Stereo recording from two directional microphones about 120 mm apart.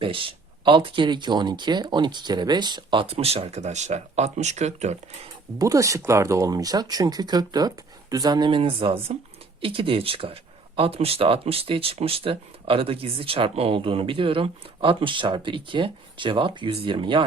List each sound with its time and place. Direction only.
0.0 s speech: 45° right (ahead or behind); by 5.3 s 70° right (ahead or behind)
5.5 s speech: 30° right (ahead or behind)